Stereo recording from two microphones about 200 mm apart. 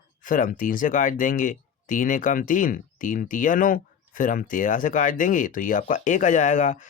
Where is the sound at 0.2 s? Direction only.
40° left (ahead or behind).